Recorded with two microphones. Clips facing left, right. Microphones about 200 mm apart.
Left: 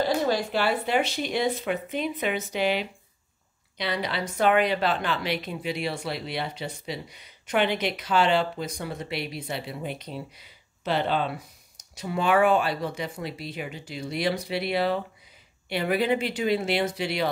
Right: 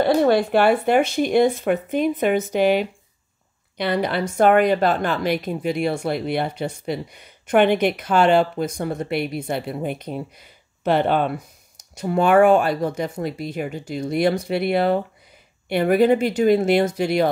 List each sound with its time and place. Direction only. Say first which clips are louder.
0.0 s a woman's voice: right 8 dB; 60° right (ahead or behind)